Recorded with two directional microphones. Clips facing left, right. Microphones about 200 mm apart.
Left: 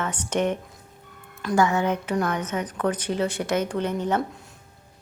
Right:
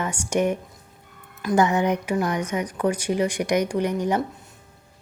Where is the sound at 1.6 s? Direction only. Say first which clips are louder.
Right 1 dB; 15° right (ahead or behind).